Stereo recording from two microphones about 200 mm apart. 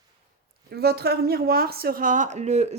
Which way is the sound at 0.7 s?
50° right (ahead or behind).